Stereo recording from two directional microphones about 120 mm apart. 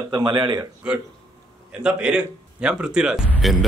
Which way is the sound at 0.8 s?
10° right (ahead or behind).